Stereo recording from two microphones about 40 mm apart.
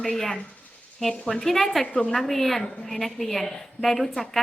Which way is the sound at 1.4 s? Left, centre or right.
Centre.